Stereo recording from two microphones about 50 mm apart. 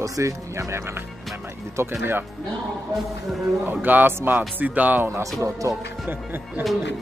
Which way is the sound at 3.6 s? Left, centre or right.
Right.